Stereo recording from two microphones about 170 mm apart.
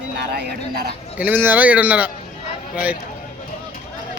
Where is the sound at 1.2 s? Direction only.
10° right (ahead or behind).